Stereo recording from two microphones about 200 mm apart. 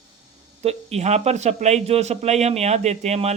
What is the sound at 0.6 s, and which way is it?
A man's voice, 30° right (ahead or behind).